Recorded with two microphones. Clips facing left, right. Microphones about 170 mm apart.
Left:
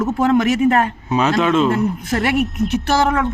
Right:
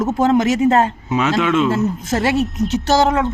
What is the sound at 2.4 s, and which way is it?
Speech, centre (ahead or behind).